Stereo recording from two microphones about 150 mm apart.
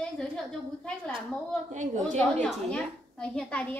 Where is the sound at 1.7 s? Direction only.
55° right (ahead or behind).